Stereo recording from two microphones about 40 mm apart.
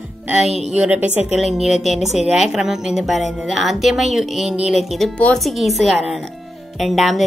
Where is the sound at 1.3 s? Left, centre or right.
Centre.